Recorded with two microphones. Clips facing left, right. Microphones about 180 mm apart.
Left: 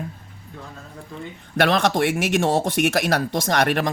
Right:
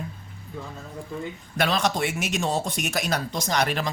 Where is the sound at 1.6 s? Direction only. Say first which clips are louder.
Left 5 dB; 60° left (ahead or behind).